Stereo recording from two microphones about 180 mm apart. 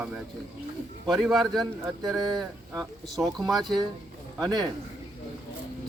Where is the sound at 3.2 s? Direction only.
20° right (ahead or behind).